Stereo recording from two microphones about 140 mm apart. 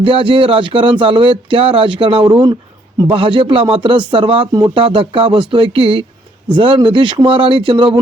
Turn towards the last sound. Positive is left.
turn(degrees=-35)  # may be behind; listen again after turning